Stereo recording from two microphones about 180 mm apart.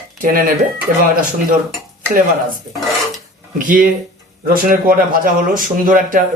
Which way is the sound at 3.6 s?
50° right (ahead or behind).